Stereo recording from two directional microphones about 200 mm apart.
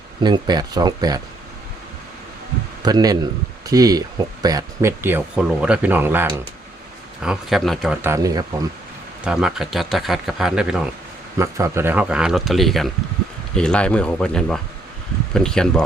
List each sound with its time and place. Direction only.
0.2 s speech: 20° right (ahead or behind)
2.8 s speech: 20° right (ahead or behind); by 7.9 s centre (ahead or behind)
8.0 s speech: 15° right (ahead or behind)
9.2 s speech: 5° right (ahead or behind)
11.3 s speech: 15° right (ahead or behind); by 15.8 s 5° left (ahead or behind)